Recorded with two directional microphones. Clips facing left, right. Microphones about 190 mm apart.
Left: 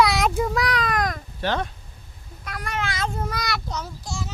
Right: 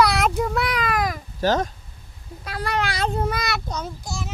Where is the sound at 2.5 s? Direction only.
30° right (ahead or behind).